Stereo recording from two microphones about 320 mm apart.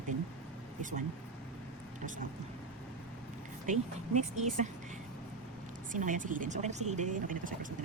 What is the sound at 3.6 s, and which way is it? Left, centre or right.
Speech, right.